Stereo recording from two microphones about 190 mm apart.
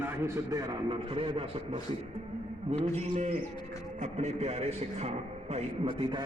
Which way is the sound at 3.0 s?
35° right (ahead or behind).